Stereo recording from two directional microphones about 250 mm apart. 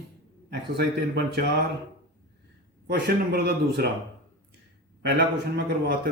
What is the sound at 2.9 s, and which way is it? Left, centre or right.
Speech, right.